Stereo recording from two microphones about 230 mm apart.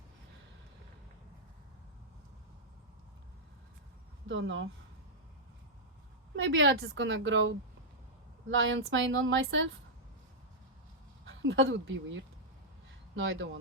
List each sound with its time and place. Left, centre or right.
4.3 s speech: right
6.3 s a woman's voice: right
11.3 s speech: right